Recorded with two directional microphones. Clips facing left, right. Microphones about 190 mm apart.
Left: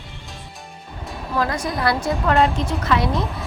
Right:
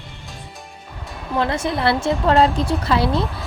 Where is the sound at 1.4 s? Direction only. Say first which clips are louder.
Right 2 dB; 25° right (ahead or behind).